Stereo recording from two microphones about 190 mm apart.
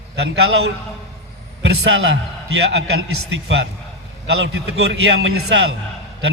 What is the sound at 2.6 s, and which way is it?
A man's voice, 65° right (ahead or behind).